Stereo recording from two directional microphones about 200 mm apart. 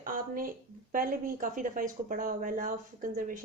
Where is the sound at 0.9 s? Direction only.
45° right (ahead or behind).